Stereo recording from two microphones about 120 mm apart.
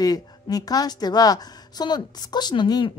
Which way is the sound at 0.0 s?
30° left (ahead or behind).